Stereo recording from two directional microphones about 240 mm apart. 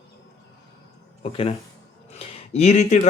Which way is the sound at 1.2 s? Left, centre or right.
Left.